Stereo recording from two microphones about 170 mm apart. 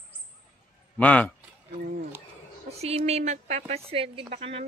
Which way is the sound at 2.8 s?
40° right (ahead or behind).